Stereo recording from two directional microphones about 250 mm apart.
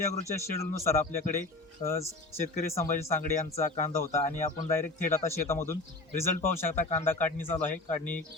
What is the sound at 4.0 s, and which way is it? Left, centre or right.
Speech, centre.